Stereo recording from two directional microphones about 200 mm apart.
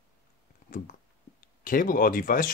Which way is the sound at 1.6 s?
45° left (ahead or behind).